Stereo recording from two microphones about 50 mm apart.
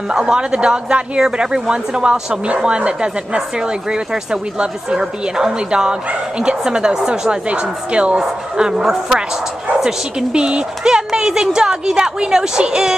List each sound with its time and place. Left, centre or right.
0.1 s a woman's voice: centre
10.3 s a woman's voice: centre
11.1 s a sound: centre
11.4 s a woman's voice: centre